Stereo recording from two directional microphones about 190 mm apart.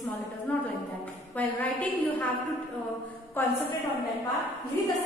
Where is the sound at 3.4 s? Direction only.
10° left (ahead or behind).